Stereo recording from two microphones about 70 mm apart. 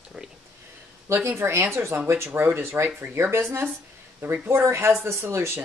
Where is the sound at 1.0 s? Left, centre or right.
Right.